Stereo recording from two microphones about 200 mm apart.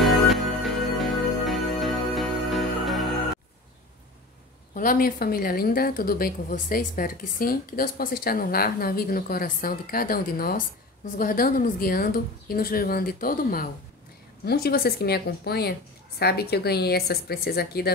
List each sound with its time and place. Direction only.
0.0 s music: centre (ahead or behind)
4.7 s a woman's voice: 45° left (ahead or behind)